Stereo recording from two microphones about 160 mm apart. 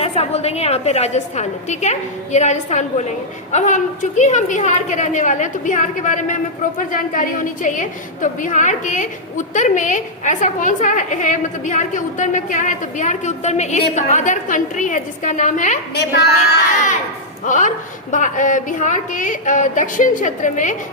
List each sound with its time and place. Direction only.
0.0 s a woman's voice: 45° left (ahead or behind)
16.0 s a child's voice: 90° left
17.4 s a man's voice: 50° left (ahead or behind)